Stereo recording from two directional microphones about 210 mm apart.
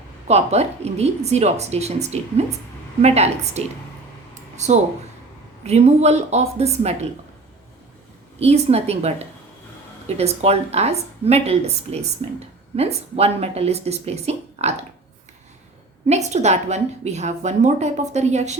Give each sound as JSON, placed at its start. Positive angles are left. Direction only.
{"t": 0.3, "sound": "a woman's voice", "side_deg": -30}
{"t": 8.4, "sound": "a woman's voice", "side_deg": -30}
{"t": 16.0, "sound": "a woman's voice", "side_deg": -30}